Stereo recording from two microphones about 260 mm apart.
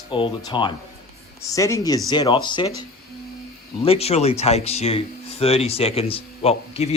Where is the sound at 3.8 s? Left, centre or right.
Left.